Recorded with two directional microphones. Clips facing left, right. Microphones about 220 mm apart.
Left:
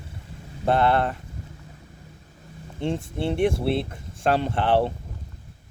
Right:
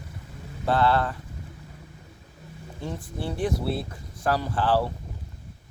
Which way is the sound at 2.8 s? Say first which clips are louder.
Left 7 dB; 25° left (ahead or behind).